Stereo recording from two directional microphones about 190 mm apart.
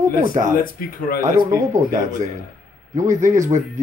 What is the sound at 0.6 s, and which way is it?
Speech, 50° left (ahead or behind).